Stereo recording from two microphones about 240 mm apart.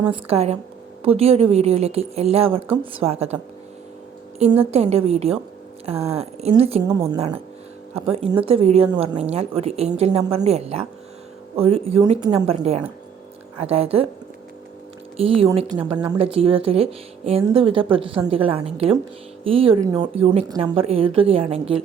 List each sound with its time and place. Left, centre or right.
0.0 s a woman's voice: right
4.7 s a woman's voice: right
6.8 s a woman's voice: centre
7.2 s a woman's voice: right
15.2 s a woman's voice: right